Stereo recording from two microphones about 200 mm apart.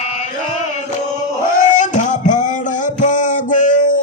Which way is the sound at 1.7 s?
40° left (ahead or behind).